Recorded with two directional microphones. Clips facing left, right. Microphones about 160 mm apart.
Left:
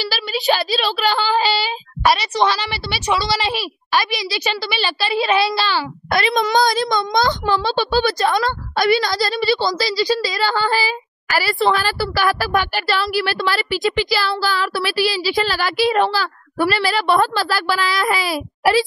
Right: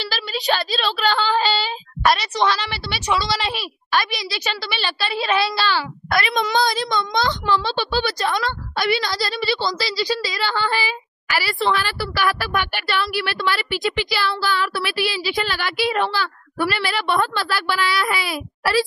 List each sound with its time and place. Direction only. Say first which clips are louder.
0.0 s a child's voice: left 4 dB; 5° left (ahead or behind)
6.1 s a child's voice: left 3 dB; 35° left (ahead or behind)
18.6 s a child's voice: left 4 dB; 25° left (ahead or behind)